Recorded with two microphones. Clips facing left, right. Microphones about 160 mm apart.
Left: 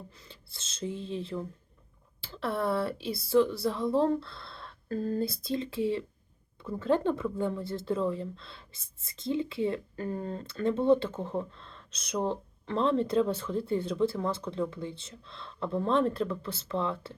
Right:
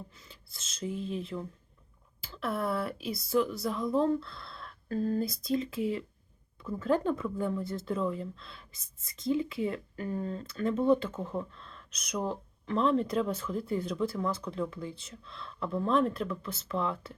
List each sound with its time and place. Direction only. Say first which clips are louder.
0.3 s speech: left 2 dB; 30° left (ahead or behind)
10.1 s speech: even; 40° left (ahead or behind)
10.4 s speech: left 2 dB; 30° left (ahead or behind)